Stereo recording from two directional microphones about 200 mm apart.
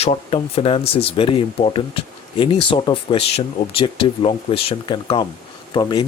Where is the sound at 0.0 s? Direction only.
30° left (ahead or behind).